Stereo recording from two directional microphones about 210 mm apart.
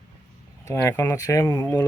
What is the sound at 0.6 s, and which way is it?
Speech, 15° left (ahead or behind).